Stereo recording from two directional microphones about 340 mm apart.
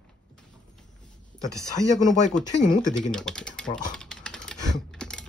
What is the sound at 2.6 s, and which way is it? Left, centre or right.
Speech, left.